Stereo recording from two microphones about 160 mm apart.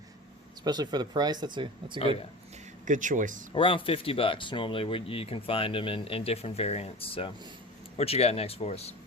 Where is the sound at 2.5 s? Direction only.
45° right (ahead or behind).